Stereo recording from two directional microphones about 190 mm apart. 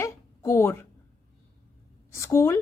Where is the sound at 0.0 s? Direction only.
15° left (ahead or behind).